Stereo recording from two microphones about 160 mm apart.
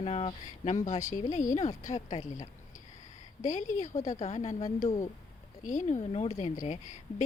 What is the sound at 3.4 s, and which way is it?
Speech, 50° left (ahead or behind).